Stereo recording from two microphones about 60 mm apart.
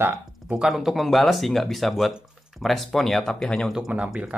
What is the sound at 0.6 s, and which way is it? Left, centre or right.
Speech, centre.